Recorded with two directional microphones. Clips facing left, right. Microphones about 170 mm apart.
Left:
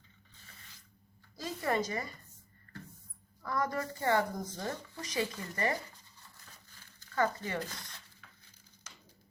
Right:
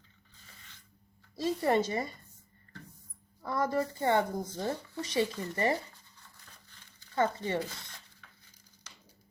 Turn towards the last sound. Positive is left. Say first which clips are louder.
# right 3 dB
turn(degrees=-25)  # may be behind; listen again after turning